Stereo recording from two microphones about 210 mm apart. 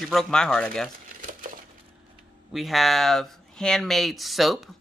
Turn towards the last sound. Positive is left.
turn(degrees=0)  # may be behind; listen again after turning